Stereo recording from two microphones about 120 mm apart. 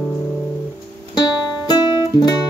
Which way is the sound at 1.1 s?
35° left (ahead or behind).